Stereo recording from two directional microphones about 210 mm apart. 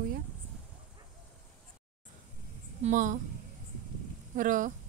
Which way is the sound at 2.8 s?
40° right (ahead or behind).